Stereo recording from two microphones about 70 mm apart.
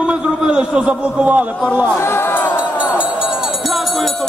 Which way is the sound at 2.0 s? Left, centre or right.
Left.